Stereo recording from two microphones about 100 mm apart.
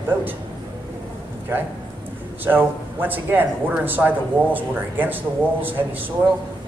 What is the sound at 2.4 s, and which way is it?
Speech, 20° right (ahead or behind).